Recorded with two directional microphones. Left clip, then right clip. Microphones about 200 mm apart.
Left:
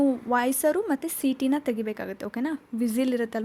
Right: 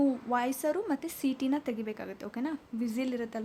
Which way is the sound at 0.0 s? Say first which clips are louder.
Left 5 dB; 25° left (ahead or behind).